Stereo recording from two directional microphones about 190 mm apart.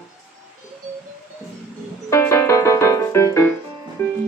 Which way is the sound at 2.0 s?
15° left (ahead or behind).